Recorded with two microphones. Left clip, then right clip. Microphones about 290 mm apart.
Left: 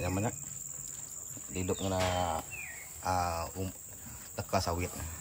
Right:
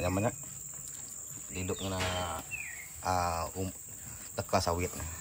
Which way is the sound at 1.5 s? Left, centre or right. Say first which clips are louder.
Left 3 dB; centre.